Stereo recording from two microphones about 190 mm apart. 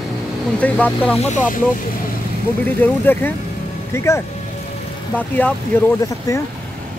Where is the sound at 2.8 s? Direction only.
10° left (ahead or behind).